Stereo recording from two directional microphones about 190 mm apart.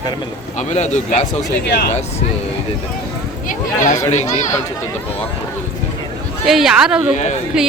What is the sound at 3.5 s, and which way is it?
Speech, 40° left (ahead or behind).